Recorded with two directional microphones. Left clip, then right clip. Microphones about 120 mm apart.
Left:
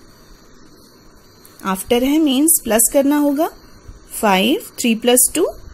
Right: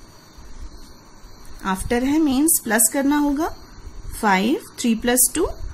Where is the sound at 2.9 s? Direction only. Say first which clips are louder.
Left 5 dB; 30° left (ahead or behind).